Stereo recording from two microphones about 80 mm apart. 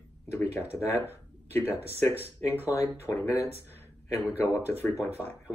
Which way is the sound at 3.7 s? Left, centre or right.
Left.